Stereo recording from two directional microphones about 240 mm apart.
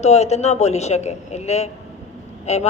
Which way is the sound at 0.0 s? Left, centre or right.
Left.